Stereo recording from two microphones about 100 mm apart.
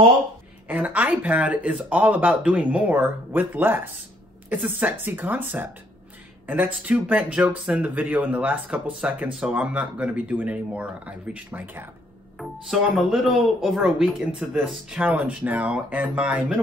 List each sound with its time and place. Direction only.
0.7 s a woman's voice: 15° right (ahead or behind)
12.6 s speech: 5° right (ahead or behind)
14.9 s speech: 15° right (ahead or behind)